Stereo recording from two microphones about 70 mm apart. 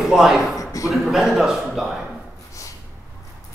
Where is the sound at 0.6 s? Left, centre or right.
Left.